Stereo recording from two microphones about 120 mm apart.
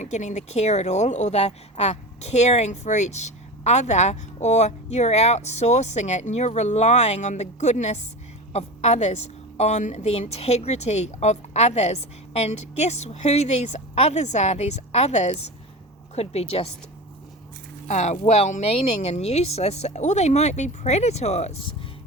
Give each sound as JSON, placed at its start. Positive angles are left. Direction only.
{"t": 0.0, "sound": "speech", "side_deg": 75}
{"t": 16.1, "sound": "speech", "side_deg": 60}
{"t": 17.8, "sound": "speech", "side_deg": 80}
{"t": 18.2, "sound": "speech", "side_deg": 65}